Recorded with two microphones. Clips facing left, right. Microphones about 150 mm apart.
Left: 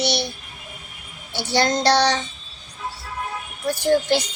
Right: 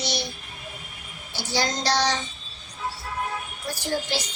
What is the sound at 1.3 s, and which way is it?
Child singing, 65° left (ahead or behind).